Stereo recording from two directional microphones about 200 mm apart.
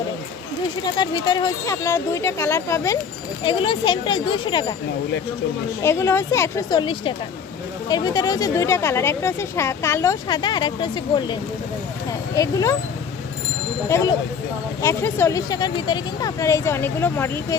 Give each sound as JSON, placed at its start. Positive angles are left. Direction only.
{"t": 0.9, "sound": "a woman's voice", "side_deg": 20}
{"t": 3.4, "sound": "speech", "side_deg": 25}
{"t": 5.8, "sound": "a woman's voice", "side_deg": 15}
{"t": 13.8, "sound": "a woman's voice", "side_deg": 15}